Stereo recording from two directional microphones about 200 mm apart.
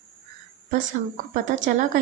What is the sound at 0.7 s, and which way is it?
Speech, 40° right (ahead or behind).